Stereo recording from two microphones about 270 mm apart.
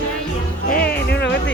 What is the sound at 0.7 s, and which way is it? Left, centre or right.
Music, left.